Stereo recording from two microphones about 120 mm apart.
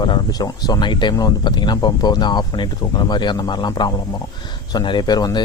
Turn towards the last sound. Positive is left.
turn(degrees=35)  # may be behind; listen again after turning